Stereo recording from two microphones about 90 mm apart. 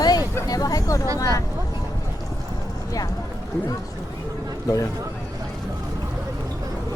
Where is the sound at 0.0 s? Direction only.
45° left (ahead or behind).